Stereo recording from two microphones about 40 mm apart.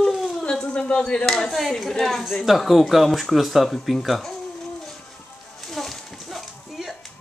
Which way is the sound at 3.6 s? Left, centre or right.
Centre.